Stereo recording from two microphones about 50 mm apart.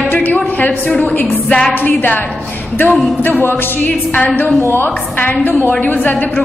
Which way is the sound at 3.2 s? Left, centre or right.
Left.